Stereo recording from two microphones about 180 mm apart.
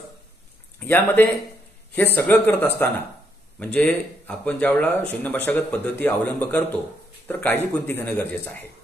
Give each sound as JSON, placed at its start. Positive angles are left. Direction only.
{"t": 0.7, "sound": "speech", "side_deg": 10}